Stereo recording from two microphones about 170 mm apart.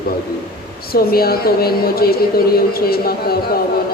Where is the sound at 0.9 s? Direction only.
65° left (ahead or behind).